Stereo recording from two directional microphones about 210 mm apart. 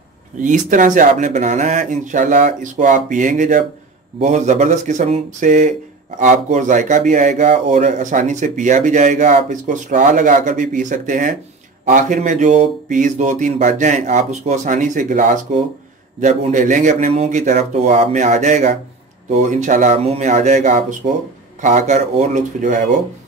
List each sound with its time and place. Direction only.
0.4 s speech: 40° right (ahead or behind)